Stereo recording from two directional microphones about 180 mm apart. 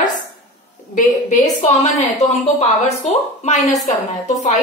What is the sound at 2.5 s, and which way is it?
A woman's voice, 35° left (ahead or behind).